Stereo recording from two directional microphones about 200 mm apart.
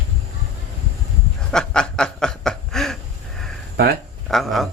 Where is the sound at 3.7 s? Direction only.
50° right (ahead or behind).